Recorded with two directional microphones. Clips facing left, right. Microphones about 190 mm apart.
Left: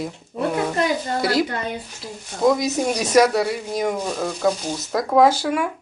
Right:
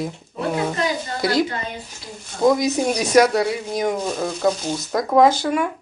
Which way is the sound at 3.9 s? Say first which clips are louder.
Right 1 dB; 10° right (ahead or behind).